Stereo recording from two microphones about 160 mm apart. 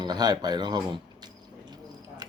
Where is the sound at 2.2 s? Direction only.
25° right (ahead or behind).